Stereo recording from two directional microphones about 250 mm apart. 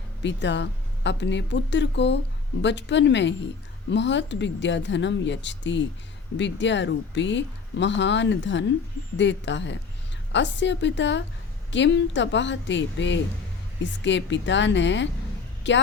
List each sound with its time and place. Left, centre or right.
0.2 s speech: left